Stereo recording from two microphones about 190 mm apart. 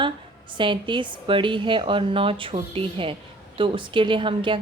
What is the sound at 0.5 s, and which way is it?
A woman's voice, 25° right (ahead or behind).